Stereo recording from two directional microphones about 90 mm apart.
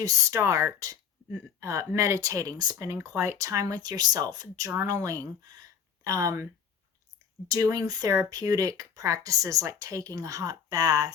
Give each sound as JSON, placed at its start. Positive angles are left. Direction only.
{"t": 0.0, "sound": "speech", "side_deg": -35}
{"t": 2.7, "sound": "speech", "side_deg": -35}